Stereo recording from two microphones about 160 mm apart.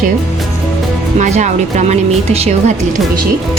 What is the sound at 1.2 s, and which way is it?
A woman's voice, 50° right (ahead or behind).